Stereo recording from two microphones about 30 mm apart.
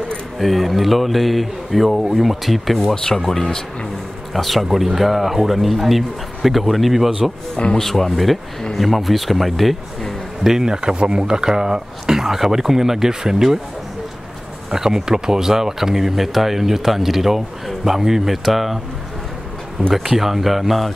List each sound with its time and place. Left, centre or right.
0.4 s speech: centre
3.2 s speech: centre
4.3 s speech: centre
7.7 s speech: centre
10.4 s speech: centre
10.7 s speech: right
14.7 s speech: centre
19.8 s speech: right
20.2 s speech: centre